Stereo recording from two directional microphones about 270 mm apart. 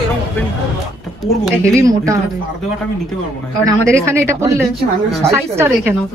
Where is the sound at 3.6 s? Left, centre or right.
Centre.